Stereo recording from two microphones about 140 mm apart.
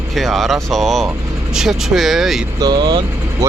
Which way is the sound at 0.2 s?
Centre (ahead or behind).